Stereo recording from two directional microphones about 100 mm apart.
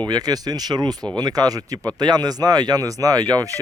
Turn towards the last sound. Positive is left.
turn(degrees=-40)  # may be behind; listen again after turning